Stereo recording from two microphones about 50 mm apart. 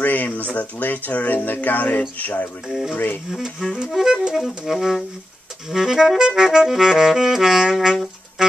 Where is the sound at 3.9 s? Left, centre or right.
Centre.